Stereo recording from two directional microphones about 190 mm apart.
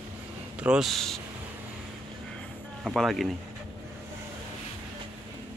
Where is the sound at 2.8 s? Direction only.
Centre (ahead or behind).